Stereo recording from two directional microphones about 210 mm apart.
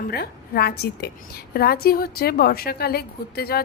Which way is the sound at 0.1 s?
50° left (ahead or behind).